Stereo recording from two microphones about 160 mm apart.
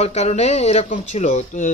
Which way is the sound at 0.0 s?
45° left (ahead or behind).